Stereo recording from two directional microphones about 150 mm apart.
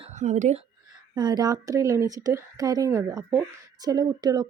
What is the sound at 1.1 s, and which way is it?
Speech, 30° right (ahead or behind).